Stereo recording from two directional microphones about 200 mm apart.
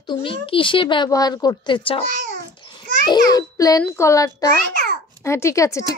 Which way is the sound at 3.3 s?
15° left (ahead or behind).